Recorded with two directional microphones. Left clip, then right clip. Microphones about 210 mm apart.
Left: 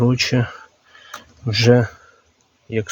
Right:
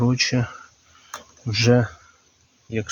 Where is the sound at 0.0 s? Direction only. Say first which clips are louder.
Left 3 dB; 30° left (ahead or behind).